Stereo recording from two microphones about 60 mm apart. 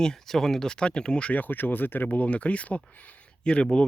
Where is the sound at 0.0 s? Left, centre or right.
Centre.